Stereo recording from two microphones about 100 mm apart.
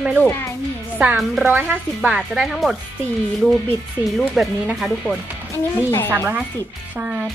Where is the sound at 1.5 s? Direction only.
20° right (ahead or behind).